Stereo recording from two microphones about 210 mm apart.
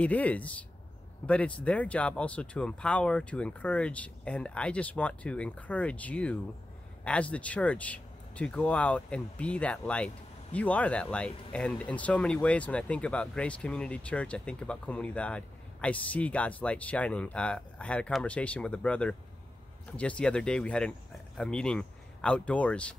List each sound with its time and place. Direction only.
0.0 s speech: 5° left (ahead or behind)